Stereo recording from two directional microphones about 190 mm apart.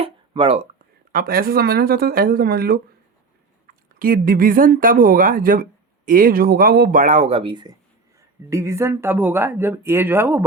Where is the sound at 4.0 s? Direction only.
50° right (ahead or behind).